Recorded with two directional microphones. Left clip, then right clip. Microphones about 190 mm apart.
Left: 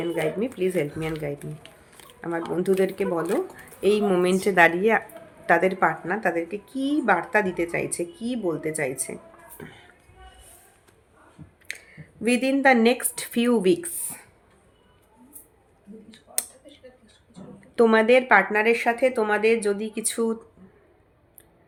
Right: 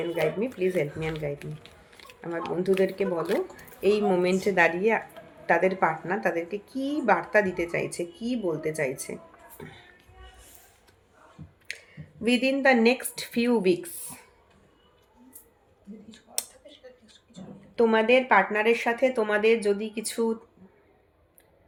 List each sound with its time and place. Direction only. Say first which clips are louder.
0.2 s a woman's voice: even; 25° left (ahead or behind)
11.7 s speech: left 2 dB; 25° left (ahead or behind)
17.7 s a woman's voice: left 3 dB; 45° left (ahead or behind); by 20.3 s 30° left (ahead or behind)